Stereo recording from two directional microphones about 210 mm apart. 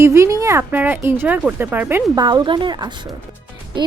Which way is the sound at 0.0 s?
15° right (ahead or behind).